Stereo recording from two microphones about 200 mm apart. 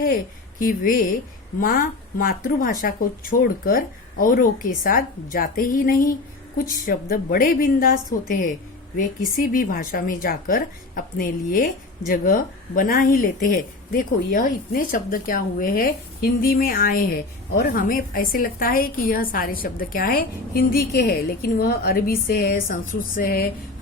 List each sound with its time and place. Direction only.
0.6 s speech: 45° left (ahead or behind)
9.0 s speech: 45° left (ahead or behind)